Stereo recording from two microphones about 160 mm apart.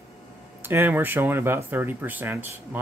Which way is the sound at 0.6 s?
15° right (ahead or behind).